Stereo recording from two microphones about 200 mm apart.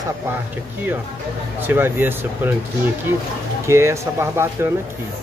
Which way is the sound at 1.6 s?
10° right (ahead or behind).